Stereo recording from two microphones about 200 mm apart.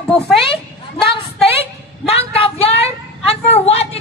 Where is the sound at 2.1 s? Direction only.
30° left (ahead or behind).